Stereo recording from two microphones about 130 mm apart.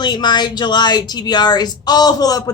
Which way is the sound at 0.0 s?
35° left (ahead or behind).